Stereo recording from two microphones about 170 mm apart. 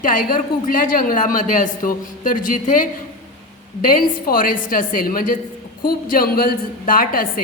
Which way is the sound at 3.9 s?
55° left (ahead or behind).